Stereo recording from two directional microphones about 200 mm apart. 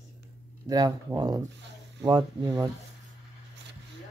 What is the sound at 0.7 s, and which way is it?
Speech, 20° right (ahead or behind).